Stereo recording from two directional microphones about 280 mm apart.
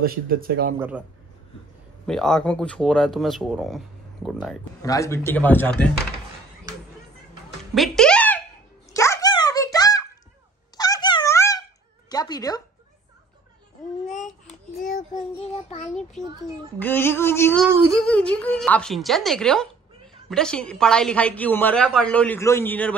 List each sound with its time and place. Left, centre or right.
0.0 s speech: right
0.7 s a woman's voice: centre
2.0 s a woman's voice: centre
4.8 s speech: centre
7.7 s music: centre
8.9 s dog: centre
12.1 s a sound: centre
16.8 s a woman's voice: centre